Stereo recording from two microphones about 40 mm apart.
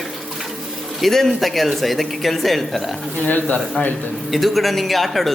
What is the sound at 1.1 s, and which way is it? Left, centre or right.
Speech, centre.